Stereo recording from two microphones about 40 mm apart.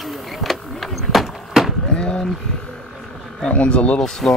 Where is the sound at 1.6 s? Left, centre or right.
Centre.